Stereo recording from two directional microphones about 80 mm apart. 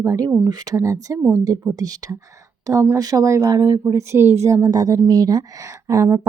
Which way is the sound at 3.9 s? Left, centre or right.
Right.